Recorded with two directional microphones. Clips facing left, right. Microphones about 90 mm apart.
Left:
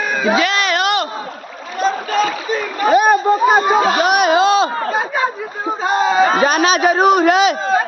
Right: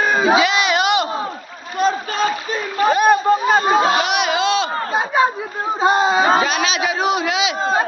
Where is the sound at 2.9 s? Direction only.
20° left (ahead or behind).